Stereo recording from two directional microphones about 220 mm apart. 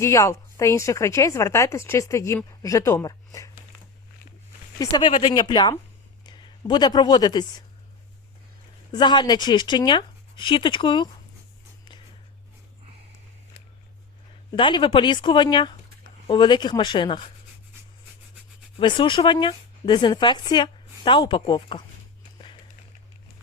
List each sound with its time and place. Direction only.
0.0 s speech: 15° left (ahead or behind)
4.8 s speech: 20° left (ahead or behind)
8.9 s speech: 20° left (ahead or behind)
14.5 s speech: 20° left (ahead or behind)
18.8 s speech: 20° left (ahead or behind)